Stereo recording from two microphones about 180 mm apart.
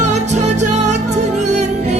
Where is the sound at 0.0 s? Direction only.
40° right (ahead or behind).